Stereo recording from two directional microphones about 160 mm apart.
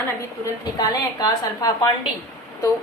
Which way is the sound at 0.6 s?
25° left (ahead or behind).